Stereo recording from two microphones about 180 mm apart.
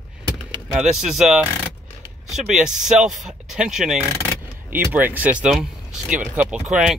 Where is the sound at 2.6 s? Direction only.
5° right (ahead or behind).